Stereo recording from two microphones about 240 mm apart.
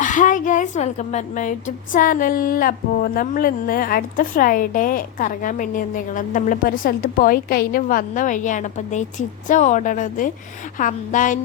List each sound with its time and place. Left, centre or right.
0.0 s speech: left